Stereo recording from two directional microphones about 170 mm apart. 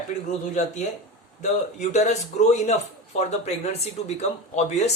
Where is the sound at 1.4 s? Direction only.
45° left (ahead or behind).